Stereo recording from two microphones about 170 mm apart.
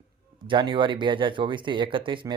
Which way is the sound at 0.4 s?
30° right (ahead or behind).